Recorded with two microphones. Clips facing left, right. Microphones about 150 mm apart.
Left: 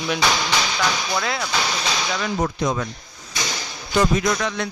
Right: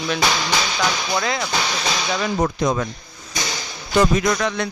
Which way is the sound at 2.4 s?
45° right (ahead or behind).